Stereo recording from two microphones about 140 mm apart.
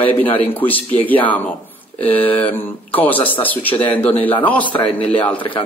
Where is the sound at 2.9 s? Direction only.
10° left (ahead or behind).